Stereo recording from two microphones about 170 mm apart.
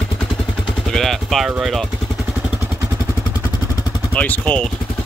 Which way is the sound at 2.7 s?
15° right (ahead or behind).